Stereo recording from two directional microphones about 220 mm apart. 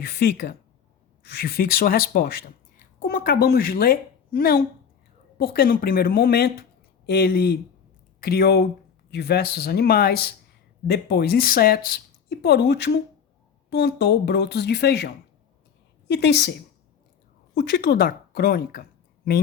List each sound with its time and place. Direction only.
0.0 s a woman's voice: 45° left (ahead or behind)